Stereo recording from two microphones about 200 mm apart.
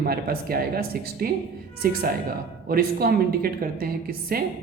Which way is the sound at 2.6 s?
50° right (ahead or behind).